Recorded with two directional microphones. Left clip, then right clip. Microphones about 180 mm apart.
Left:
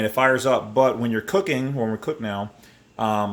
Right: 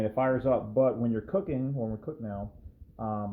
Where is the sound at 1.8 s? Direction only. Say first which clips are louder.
Left 10 dB; 55° left (ahead or behind).